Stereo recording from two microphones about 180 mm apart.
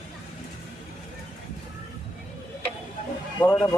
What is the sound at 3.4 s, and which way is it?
Speech, 20° left (ahead or behind).